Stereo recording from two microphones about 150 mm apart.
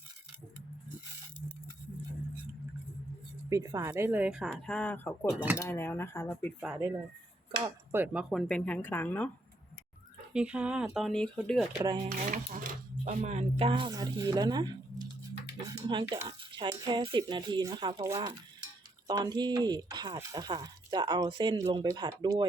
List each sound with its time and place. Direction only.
3.5 s speech: 25° right (ahead or behind)
3.9 s speech: 10° right (ahead or behind)
4.4 s speech: 5° left (ahead or behind)
5.3 s speech: 10° right (ahead or behind)
5.5 s speech: 15° left (ahead or behind)
6.8 s speech: 20° right (ahead or behind); by 9.3 s 10° left (ahead or behind)
10.3 s speech: 5° right (ahead or behind)
12.0 s speech: 60° right (ahead or behind); by 22.4 s 30° right (ahead or behind)